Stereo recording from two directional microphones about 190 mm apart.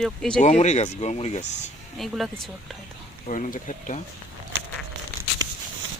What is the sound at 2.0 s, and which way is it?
Speech, centre (ahead or behind).